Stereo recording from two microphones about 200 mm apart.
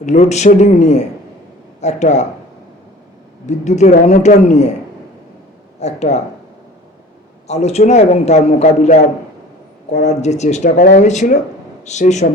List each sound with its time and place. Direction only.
0.0 s a man's voice: 35° left (ahead or behind)
3.4 s a man's voice: 35° left (ahead or behind)
5.8 s a man's voice: 35° left (ahead or behind)
7.4 s a man's voice: 35° left (ahead or behind)